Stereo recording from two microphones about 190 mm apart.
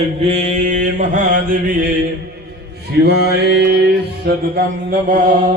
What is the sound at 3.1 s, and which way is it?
Mantra, 60° right (ahead or behind).